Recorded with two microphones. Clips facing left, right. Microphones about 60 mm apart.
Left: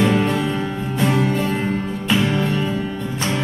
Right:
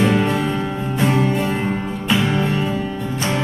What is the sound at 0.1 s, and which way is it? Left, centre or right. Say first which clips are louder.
Music: right 1 dB; centre.